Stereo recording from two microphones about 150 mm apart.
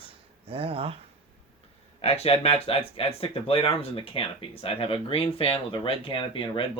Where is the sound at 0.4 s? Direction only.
40° right (ahead or behind).